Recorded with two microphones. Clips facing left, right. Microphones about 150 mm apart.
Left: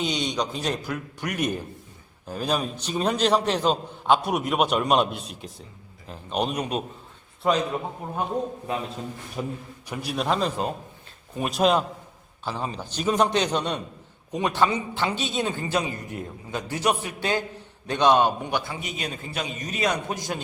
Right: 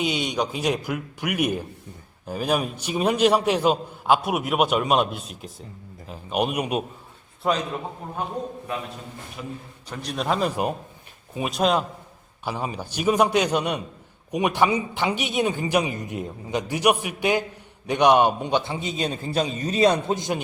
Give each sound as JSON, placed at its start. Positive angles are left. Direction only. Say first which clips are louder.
{"t": 0.0, "sound": "a man's voice", "louder": "right 2 dB", "side_deg": -10}
{"t": 7.4, "sound": "a man's voice", "louder": "left 1 dB", "side_deg": 0}
{"t": 9.4, "sound": "a man's voice", "louder": "left 5 dB", "side_deg": 35}
{"t": 9.9, "sound": "a man's voice", "louder": "even", "side_deg": 5}
{"t": 12.5, "sound": "a man's voice", "louder": "right 2 dB", "side_deg": -10}